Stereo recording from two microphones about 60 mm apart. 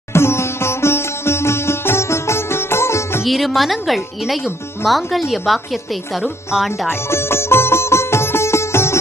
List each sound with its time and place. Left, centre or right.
0.1 s sitar: left
3.3 s a woman's voice: centre
6.9 s music: left